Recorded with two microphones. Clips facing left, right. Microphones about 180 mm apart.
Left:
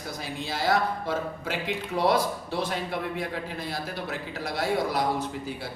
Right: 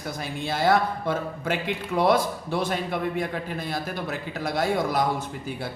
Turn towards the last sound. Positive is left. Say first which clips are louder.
# right 2 dB
turn(degrees=-50)  # may be behind; listen again after turning